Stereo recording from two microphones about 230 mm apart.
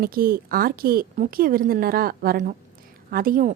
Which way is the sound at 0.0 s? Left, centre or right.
Right.